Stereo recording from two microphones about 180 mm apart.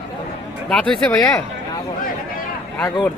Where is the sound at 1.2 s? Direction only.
20° left (ahead or behind).